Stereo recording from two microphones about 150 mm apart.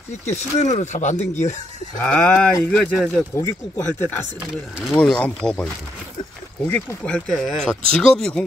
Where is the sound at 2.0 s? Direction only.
10° left (ahead or behind).